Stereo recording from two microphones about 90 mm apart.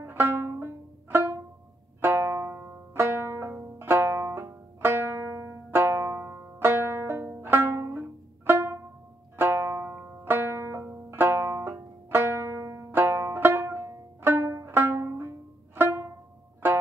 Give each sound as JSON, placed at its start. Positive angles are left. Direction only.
{"t": 0.0, "sound": "banjo", "side_deg": -25}